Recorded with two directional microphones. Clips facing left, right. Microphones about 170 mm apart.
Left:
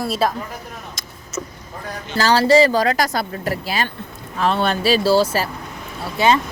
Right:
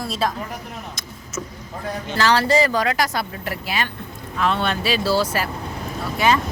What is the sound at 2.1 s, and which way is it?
Speech, 30° left (ahead or behind).